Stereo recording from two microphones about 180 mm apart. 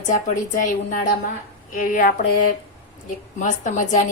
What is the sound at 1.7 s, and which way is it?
Speech, 50° left (ahead or behind).